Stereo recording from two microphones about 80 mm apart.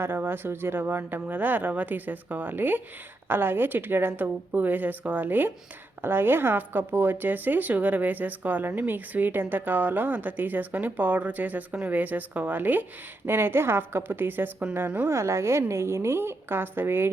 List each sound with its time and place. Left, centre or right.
0.0 s speech: right
15.1 s a woman's voice: right